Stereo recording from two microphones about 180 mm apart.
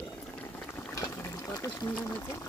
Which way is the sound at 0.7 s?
15° left (ahead or behind).